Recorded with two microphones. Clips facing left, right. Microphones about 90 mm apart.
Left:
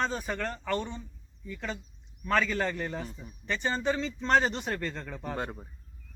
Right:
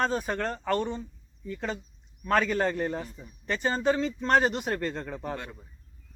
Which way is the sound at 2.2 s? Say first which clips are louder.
Right 3 dB; 20° right (ahead or behind).